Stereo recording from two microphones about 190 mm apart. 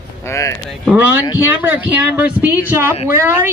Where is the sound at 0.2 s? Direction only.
15° left (ahead or behind).